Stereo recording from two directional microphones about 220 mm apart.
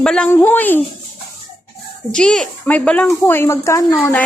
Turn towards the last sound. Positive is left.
turn(degrees=15)  # may be behind; listen again after turning